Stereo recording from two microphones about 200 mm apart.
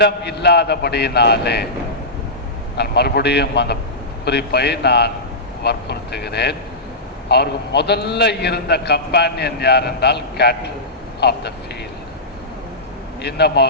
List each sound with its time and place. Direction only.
0.0 s a man's voice: 55° left (ahead or behind)
2.7 s a man's voice: 55° left (ahead or behind)
13.2 s a man's voice: 55° left (ahead or behind)